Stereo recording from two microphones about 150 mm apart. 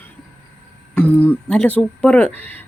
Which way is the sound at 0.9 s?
10° left (ahead or behind).